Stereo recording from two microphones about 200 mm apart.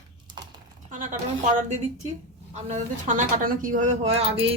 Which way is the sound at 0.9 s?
40° right (ahead or behind).